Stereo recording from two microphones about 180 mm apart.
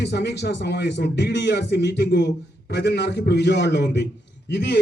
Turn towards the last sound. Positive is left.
turn(degrees=70)  # may be behind; listen again after turning